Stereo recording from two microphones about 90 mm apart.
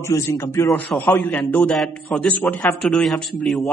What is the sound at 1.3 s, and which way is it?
A man's voice, 15° left (ahead or behind).